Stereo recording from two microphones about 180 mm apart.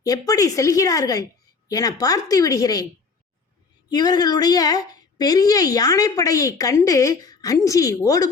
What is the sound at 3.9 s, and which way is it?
A woman's voice, 20° left (ahead or behind).